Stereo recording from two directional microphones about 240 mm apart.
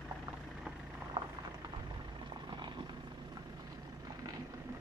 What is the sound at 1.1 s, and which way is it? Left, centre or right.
Vehicle, centre.